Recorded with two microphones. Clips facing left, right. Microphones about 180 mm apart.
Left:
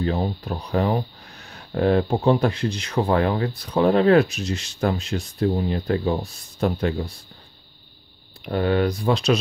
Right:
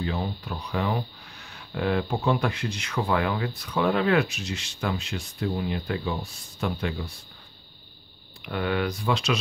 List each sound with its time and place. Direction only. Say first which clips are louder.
0.0 s speech: left 6 dB; 40° left (ahead or behind)
8.5 s speech: left 6 dB; 35° left (ahead or behind)